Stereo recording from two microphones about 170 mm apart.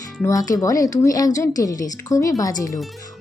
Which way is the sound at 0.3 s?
20° left (ahead or behind).